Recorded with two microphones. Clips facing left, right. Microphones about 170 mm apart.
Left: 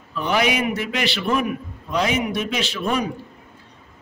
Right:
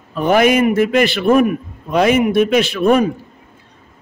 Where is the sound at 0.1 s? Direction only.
50° right (ahead or behind).